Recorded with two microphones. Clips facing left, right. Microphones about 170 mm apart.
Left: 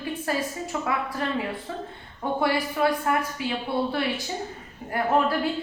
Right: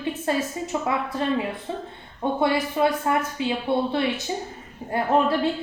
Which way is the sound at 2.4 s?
20° right (ahead or behind).